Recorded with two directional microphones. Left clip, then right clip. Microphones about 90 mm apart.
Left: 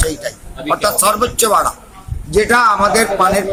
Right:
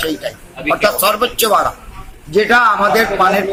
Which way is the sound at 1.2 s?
40° left (ahead or behind).